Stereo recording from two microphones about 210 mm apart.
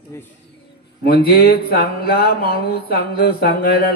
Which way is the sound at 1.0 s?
45° left (ahead or behind).